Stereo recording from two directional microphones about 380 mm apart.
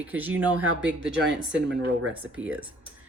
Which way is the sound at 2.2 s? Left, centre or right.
Centre.